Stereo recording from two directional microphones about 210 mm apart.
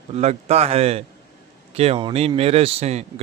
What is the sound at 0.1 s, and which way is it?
Speech, 30° right (ahead or behind).